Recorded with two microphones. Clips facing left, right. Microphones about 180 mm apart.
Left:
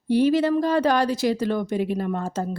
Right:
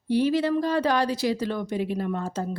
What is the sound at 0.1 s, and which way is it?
A woman's voice, 50° left (ahead or behind).